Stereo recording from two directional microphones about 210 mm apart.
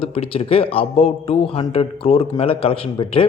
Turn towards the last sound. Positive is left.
turn(degrees=25)  # may be behind; listen again after turning